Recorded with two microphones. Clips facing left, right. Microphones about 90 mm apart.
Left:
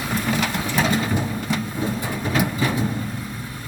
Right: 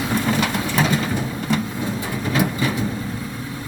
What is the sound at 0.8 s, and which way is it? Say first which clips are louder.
Printer: even; 15° left (ahead or behind).